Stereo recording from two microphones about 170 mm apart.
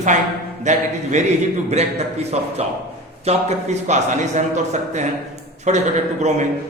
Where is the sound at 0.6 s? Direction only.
45° right (ahead or behind).